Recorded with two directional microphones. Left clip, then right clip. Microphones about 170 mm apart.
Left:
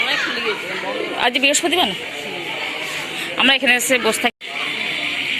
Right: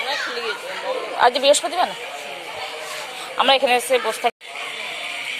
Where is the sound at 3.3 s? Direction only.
15° right (ahead or behind).